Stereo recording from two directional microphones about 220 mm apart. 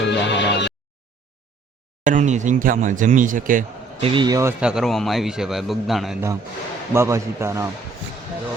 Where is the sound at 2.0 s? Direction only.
35° right (ahead or behind).